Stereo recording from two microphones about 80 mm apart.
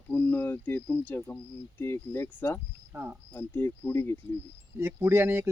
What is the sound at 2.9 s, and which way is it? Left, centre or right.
Speech, right.